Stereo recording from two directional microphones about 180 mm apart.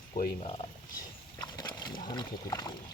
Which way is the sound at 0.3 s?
30° left (ahead or behind).